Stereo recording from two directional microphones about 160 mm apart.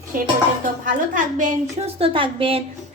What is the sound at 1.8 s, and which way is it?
Speech, 35° right (ahead or behind).